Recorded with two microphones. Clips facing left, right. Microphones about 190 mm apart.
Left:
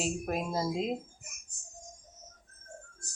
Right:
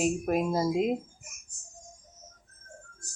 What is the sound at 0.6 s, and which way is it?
Speech, 10° right (ahead or behind).